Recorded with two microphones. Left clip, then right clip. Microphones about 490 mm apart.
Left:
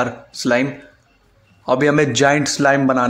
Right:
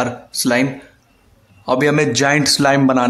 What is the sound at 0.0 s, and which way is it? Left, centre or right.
Speech, right.